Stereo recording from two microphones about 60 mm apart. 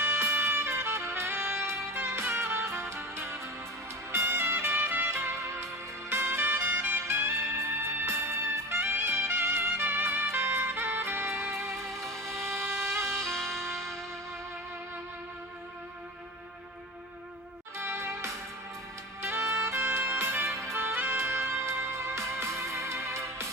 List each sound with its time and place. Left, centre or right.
0.0 s music: right
5.2 s music: right
6.6 s music: right
13.2 s music: centre
17.7 s music: right
19.4 s music: right